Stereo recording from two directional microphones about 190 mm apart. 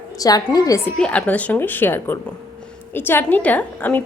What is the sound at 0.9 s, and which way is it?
Speech, 5° left (ahead or behind).